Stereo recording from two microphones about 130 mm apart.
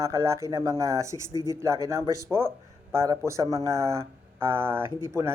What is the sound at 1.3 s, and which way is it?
Speech, 30° left (ahead or behind).